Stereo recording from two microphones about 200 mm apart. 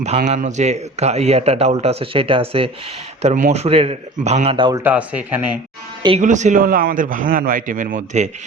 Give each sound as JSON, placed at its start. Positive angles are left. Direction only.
{"t": 0.2, "sound": "speech", "side_deg": -35}
{"t": 4.8, "sound": "speech", "side_deg": -5}
{"t": 6.0, "sound": "speech", "side_deg": -25}
{"t": 6.2, "sound": "speech", "side_deg": -40}